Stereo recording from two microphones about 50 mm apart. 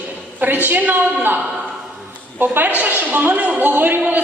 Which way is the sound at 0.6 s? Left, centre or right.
Right.